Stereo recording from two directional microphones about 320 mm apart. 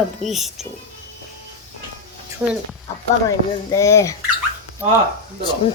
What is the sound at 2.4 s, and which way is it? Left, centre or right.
Speech, centre.